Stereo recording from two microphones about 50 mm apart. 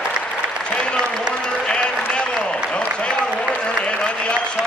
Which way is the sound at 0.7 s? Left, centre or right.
Centre.